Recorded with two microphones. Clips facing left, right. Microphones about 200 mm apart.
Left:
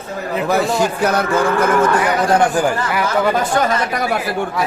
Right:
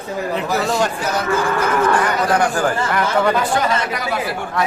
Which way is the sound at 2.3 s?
25° left (ahead or behind).